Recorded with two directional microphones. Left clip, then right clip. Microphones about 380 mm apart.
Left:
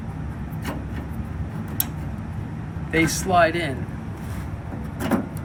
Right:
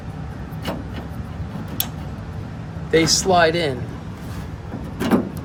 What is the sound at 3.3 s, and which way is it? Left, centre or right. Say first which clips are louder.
Speech: right 1 dB; centre.